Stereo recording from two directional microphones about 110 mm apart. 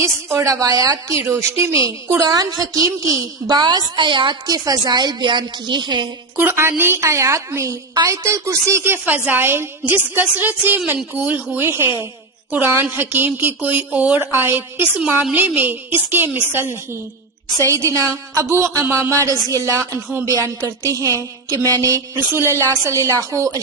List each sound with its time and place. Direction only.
0.0 s a woman's voice: 25° right (ahead or behind); by 6.1 s 45° right (ahead or behind)
6.3 s a woman's voice: 20° right (ahead or behind)